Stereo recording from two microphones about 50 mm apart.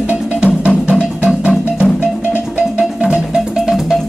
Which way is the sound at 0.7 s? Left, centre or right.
Right.